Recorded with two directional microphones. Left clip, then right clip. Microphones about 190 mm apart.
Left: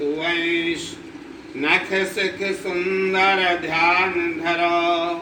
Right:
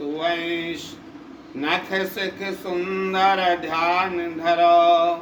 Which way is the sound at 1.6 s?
20° right (ahead or behind).